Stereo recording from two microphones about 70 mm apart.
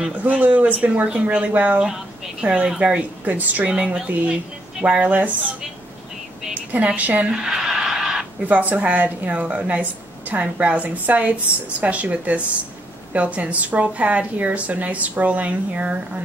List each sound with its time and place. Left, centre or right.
0.0 s a woman's voice: right
6.5 s a woman's voice: right
7.2 s a sound: centre
8.5 s a woman's voice: right